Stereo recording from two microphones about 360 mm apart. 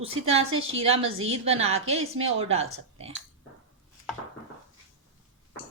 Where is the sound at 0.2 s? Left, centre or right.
Right.